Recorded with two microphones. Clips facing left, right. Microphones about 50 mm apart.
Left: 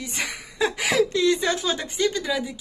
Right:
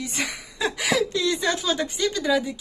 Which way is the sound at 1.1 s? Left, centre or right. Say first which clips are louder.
Left 2 dB; left.